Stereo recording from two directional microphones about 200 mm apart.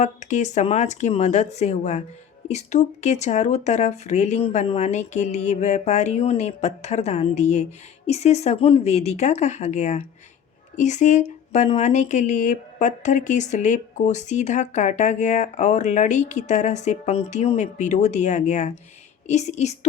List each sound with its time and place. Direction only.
0.0 s speech: 35° left (ahead or behind)